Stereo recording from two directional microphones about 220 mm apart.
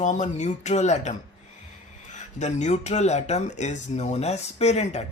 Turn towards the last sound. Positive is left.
turn(degrees=30)  # may be behind; listen again after turning